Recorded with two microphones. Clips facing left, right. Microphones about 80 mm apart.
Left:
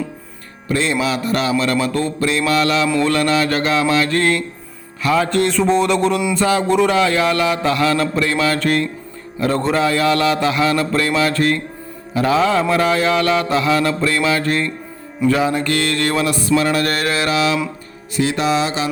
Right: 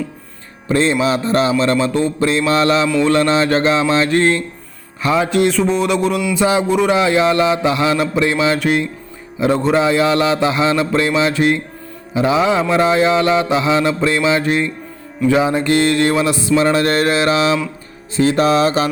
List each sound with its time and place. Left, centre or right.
0.7 s a man's voice: right
2.2 s mantra: right
3.0 s a man's voice: right
5.3 s a sound: centre
6.3 s a sound: centre
6.9 s a man's voice: right
16.6 s mantra: right